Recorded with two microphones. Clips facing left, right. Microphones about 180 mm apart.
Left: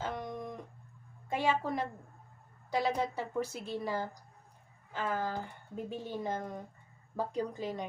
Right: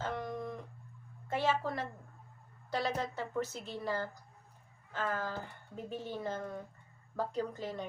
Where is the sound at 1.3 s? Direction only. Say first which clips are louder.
Left 1 dB; 15° left (ahead or behind).